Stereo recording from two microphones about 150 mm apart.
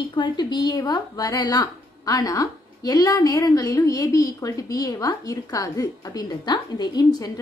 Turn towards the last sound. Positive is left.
turn(degrees=25)  # may be behind; listen again after turning